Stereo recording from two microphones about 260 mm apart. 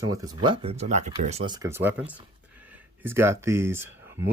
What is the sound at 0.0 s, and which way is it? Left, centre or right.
Speech, centre.